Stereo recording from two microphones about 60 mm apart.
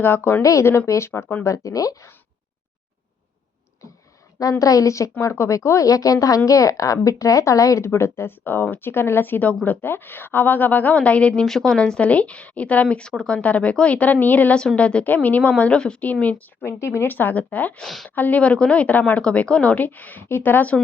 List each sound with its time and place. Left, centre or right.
0.4 s speech: left
1.5 s speech: left
4.6 s speech: left
7.9 s a woman's voice: left
11.4 s a woman's voice: centre
16.6 s speech: left
17.7 s a woman's voice: centre
18.1 s a woman's voice: left